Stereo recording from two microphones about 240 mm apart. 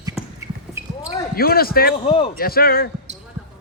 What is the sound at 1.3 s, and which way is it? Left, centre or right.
Speech, left.